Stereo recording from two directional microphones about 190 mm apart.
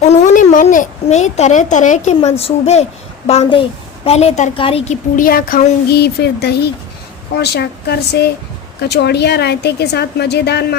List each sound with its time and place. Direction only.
0.1 s a child's voice: 40° left (ahead or behind)
5.1 s a woman's voice: 45° left (ahead or behind)